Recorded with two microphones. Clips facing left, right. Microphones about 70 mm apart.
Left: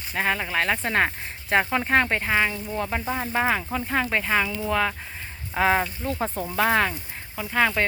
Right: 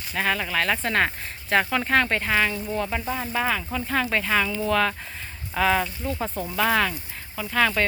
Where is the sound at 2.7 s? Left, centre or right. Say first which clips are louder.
Even; left.